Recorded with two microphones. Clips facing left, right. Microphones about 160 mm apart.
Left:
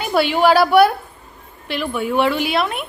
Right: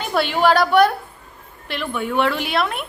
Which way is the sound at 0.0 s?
5° left (ahead or behind).